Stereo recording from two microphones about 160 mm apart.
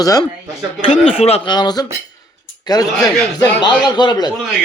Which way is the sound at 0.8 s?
35° left (ahead or behind).